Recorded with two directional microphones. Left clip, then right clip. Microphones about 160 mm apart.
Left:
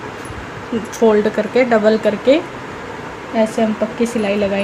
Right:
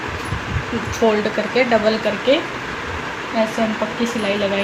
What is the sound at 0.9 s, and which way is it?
Speech, 60° left (ahead or behind).